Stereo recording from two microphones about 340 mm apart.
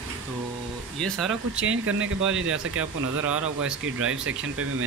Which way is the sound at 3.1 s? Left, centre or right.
Right.